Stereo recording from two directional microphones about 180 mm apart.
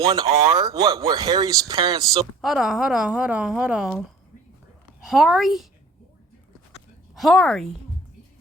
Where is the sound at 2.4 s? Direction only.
Centre (ahead or behind).